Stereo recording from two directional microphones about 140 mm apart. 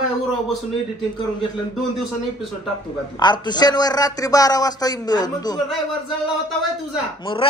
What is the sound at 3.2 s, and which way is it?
A man's voice, 30° left (ahead or behind).